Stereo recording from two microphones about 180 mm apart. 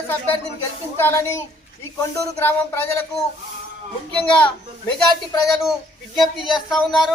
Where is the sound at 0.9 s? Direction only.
15° left (ahead or behind).